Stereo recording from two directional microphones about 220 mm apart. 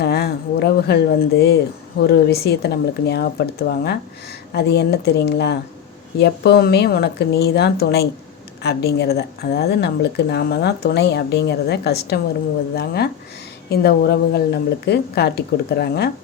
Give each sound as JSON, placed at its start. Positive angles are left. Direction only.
{"t": 0.0, "sound": "speech", "side_deg": 45}